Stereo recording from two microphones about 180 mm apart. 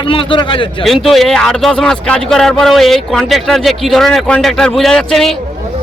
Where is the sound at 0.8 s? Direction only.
Centre (ahead or behind).